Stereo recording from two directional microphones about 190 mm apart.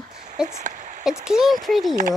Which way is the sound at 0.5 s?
40° right (ahead or behind).